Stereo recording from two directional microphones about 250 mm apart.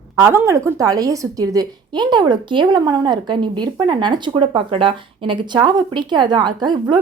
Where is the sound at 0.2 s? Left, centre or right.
Centre.